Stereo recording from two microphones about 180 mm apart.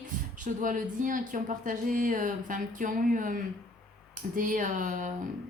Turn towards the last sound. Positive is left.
turn(degrees=-45)  # may be behind; listen again after turning